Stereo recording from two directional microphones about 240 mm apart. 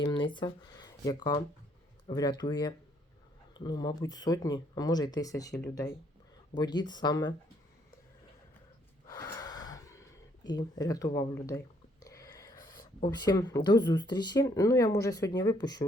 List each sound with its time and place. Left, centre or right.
0.0 s a sound: centre
0.3 s speech: centre
6.6 s speech: centre
9.0 s gasp: centre
10.4 s speech: centre
12.0 s a sound: centre
13.1 s speech: centre